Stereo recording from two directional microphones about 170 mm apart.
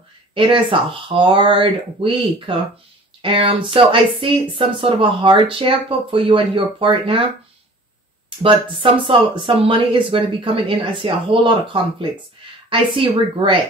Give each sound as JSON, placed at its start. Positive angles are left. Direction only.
{"t": 0.3, "sound": "speech", "side_deg": -30}
{"t": 8.4, "sound": "speech", "side_deg": -30}